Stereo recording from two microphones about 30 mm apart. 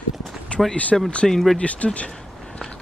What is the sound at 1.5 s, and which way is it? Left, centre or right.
Speech, left.